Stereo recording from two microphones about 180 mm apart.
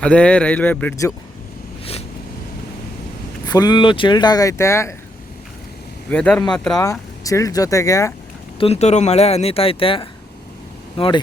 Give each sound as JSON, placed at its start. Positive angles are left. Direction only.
{"t": 0.0, "sound": "speech", "side_deg": 5}
{"t": 1.8, "sound": "a sound", "side_deg": 35}
{"t": 3.5, "sound": "speech", "side_deg": 20}
{"t": 6.1, "sound": "speech", "side_deg": 5}
{"t": 7.3, "sound": "speech", "side_deg": 20}
{"t": 8.5, "sound": "speech", "side_deg": 35}